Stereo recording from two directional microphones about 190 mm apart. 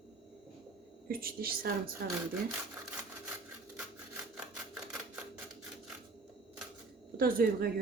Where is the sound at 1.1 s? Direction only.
50° right (ahead or behind).